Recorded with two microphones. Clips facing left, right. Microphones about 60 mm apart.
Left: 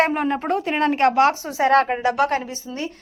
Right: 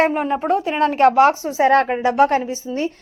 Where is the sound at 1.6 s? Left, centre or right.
Right.